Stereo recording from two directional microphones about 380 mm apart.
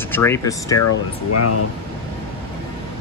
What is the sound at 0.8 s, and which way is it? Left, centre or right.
Speech, left.